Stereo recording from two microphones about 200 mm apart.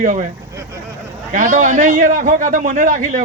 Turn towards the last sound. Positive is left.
turn(degrees=-40)  # may be behind; listen again after turning